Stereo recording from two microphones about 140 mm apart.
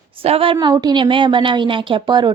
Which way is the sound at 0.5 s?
25° right (ahead or behind).